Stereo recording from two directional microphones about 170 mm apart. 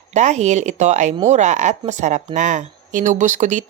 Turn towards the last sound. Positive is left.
turn(degrees=-45)  # may be behind; listen again after turning